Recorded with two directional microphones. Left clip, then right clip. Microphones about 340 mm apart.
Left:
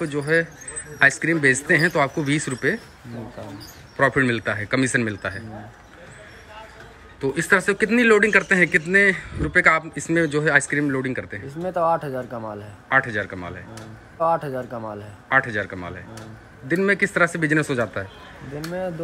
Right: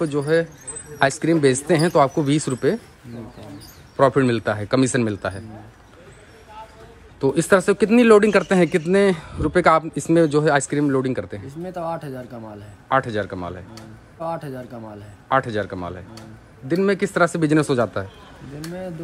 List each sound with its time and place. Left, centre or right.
0.0 s a man's voice: centre
3.9 s a man's voice: centre
7.2 s a man's voice: centre
11.6 s speech: centre
12.9 s a man's voice: centre
14.2 s speech: centre
15.2 s a man's voice: centre